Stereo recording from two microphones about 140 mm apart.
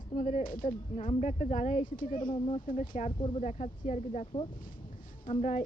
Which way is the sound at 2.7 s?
70° left (ahead or behind).